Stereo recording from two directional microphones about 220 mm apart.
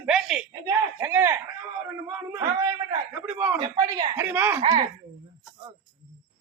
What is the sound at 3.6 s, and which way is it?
Speech, 20° right (ahead or behind).